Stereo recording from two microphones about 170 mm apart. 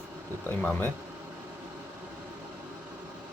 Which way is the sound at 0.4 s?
10° left (ahead or behind).